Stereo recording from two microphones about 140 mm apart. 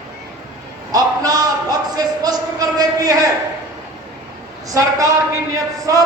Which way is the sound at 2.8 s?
25° right (ahead or behind).